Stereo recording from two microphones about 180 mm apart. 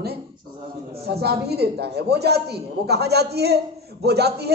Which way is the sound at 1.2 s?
65° right (ahead or behind).